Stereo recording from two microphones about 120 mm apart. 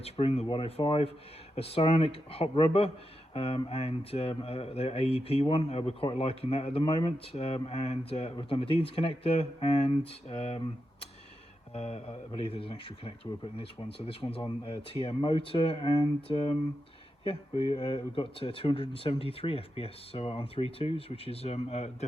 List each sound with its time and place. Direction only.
0.0 s speech: 55° left (ahead or behind)
0.4 s speech: 45° left (ahead or behind)
8.4 s speech: 50° left (ahead or behind)
11.7 s speech: 60° left (ahead or behind)